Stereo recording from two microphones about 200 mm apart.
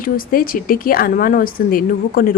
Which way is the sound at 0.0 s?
45° left (ahead or behind).